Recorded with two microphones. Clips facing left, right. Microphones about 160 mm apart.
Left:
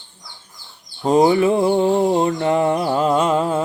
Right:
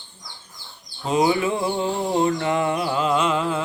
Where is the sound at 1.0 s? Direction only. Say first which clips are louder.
Left 6 dB; 40° left (ahead or behind).